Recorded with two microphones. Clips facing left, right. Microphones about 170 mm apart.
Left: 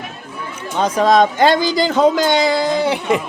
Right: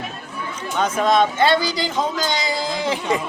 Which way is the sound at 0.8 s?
35° left (ahead or behind).